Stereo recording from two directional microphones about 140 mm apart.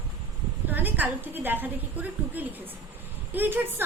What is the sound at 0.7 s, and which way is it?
A woman's voice, 10° right (ahead or behind).